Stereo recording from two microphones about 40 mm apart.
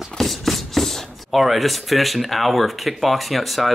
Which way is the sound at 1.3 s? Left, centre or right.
Centre.